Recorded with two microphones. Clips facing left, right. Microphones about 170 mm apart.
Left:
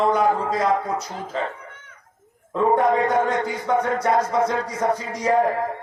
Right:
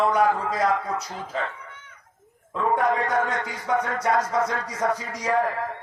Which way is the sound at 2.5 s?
35° left (ahead or behind).